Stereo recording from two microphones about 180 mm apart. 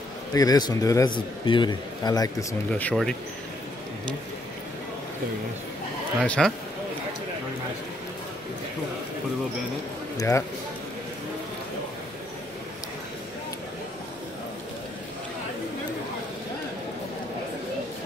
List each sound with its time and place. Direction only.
0.3 s a man's voice: 20° left (ahead or behind)
2.7 s speech: 5° left (ahead or behind)
6.2 s speech: 5° left (ahead or behind)
10.1 s speech: 15° left (ahead or behind)